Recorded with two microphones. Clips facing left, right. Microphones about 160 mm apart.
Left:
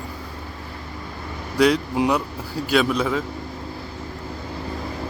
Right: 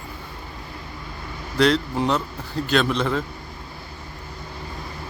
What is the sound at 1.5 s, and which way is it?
Speech, 10° left (ahead or behind).